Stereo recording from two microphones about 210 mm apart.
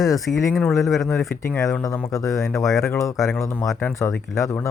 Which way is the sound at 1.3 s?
10° left (ahead or behind).